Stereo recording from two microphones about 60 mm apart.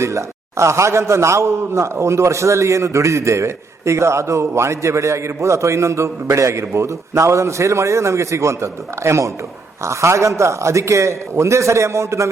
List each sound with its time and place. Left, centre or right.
0.0 s a man's voice: right